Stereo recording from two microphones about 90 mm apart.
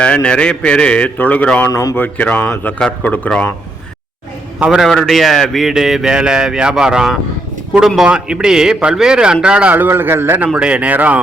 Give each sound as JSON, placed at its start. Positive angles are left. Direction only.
{"t": 0.0, "sound": "a man's voice", "side_deg": 10}
{"t": 1.7, "sound": "speech", "side_deg": 40}
{"t": 2.0, "sound": "a man's voice", "side_deg": 15}
{"t": 4.6, "sound": "a man's voice", "side_deg": -5}
{"t": 9.7, "sound": "a man's voice", "side_deg": -25}
{"t": 10.5, "sound": "a man's voice", "side_deg": -15}